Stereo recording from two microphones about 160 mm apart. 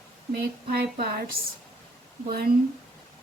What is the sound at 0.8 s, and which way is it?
Speech, 75° right (ahead or behind).